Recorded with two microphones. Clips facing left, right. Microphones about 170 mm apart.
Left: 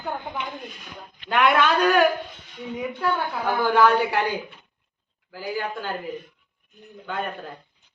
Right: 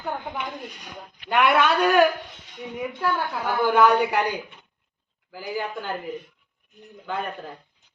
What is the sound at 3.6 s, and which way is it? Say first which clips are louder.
Speech: right 1 dB; 5° right (ahead or behind).